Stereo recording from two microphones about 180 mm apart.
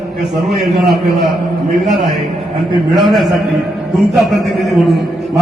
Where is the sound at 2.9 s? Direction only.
Centre (ahead or behind).